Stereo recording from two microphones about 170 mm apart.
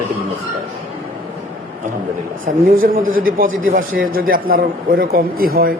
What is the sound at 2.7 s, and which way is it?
A man's voice, 55° right (ahead or behind).